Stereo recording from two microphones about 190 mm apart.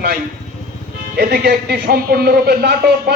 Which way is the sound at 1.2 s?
55° right (ahead or behind).